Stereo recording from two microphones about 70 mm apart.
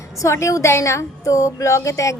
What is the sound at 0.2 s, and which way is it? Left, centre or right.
Speech, left.